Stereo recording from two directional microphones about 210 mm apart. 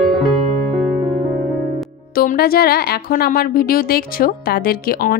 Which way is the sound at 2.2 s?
45° left (ahead or behind).